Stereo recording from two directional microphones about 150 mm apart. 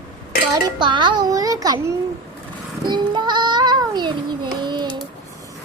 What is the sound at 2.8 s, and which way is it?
Child singing, 30° right (ahead or behind).